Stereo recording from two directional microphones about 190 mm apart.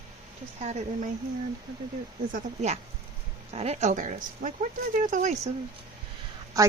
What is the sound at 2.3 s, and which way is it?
A woman's voice, 35° right (ahead or behind).